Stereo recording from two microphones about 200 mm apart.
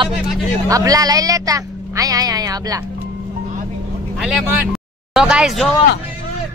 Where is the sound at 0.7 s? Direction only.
15° right (ahead or behind).